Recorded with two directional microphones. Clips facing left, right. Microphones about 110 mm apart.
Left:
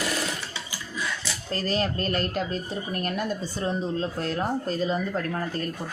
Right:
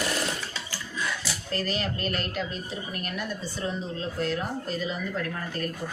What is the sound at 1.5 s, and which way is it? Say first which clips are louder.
Speech: left 4 dB; 35° left (ahead or behind).